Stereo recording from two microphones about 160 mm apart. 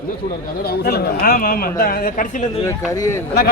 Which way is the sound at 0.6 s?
80° left.